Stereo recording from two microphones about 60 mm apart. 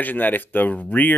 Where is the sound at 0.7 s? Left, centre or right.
Left.